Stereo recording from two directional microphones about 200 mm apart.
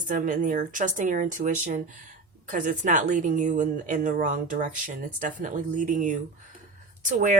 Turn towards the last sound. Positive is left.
turn(degrees=-40)  # may be behind; listen again after turning